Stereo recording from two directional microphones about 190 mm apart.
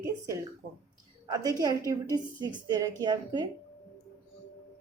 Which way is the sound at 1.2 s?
20° right (ahead or behind).